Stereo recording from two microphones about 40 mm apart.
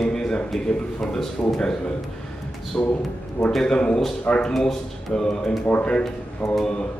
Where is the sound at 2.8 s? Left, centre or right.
Left.